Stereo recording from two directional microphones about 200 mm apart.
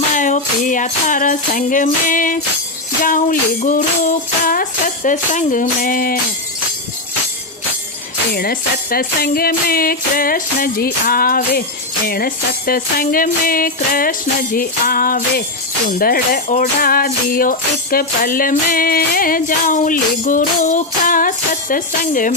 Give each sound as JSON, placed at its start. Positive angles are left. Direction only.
{"t": 0.1, "sound": "music", "side_deg": 40}
{"t": 8.3, "sound": "speech", "side_deg": 50}